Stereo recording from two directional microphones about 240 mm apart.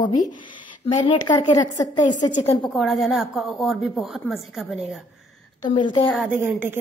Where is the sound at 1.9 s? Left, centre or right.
Left.